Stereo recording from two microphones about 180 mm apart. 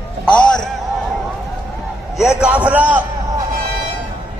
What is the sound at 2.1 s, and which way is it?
Speech, 5° right (ahead or behind).